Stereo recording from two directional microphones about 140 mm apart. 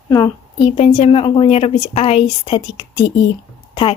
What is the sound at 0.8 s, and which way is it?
A woman's voice, 45° left (ahead or behind).